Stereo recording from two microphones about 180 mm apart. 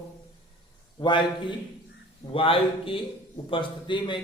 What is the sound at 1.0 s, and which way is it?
Speech, 25° left (ahead or behind).